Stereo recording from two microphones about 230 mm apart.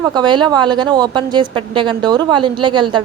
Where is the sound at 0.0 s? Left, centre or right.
Centre.